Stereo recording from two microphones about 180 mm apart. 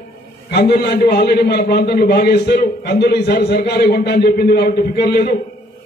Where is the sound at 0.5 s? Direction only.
65° left (ahead or behind).